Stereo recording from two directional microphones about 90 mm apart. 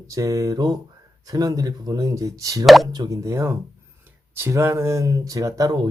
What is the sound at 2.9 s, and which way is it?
Speech, 45° right (ahead or behind).